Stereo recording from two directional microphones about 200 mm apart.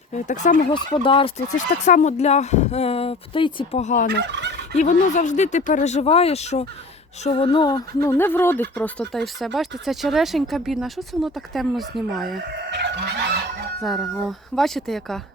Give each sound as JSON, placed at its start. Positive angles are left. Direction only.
{"t": 0.1, "sound": "speech", "side_deg": 35}
{"t": 0.7, "sound": "speech", "side_deg": 25}
{"t": 1.5, "sound": "speech", "side_deg": 40}
{"t": 4.1, "sound": "fowl", "side_deg": -60}
{"t": 4.8, "sound": "speech", "side_deg": 35}
{"t": 13.8, "sound": "speech", "side_deg": 0}